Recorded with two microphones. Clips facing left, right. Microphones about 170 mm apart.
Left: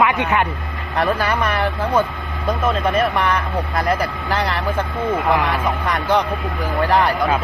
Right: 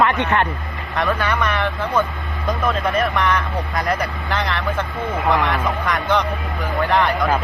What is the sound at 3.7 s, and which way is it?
Speech, 30° left (ahead or behind).